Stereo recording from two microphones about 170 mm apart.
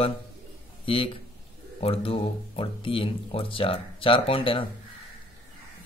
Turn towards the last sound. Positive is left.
turn(degrees=30)  # may be behind; listen again after turning